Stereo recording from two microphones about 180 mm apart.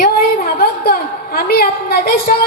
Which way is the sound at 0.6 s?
60° left (ahead or behind).